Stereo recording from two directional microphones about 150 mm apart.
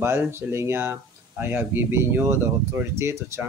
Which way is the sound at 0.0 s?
15° right (ahead or behind).